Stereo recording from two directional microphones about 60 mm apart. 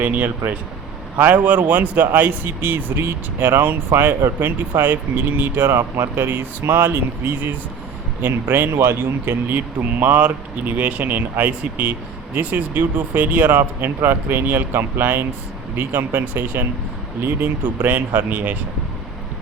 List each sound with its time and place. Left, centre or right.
0.0 s speech: right